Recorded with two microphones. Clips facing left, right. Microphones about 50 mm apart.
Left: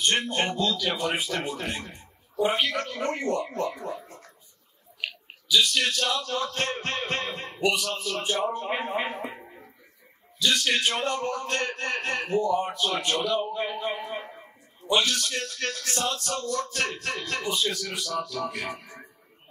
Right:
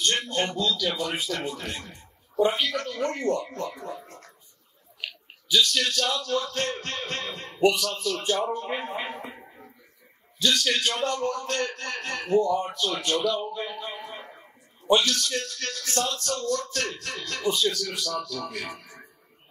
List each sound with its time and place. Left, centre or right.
0.0 s a man's voice: centre
5.6 s a man's voice: centre
9.4 s a sound: centre
10.4 s speech: centre
14.3 s a sound: centre
15.0 s a man's voice: centre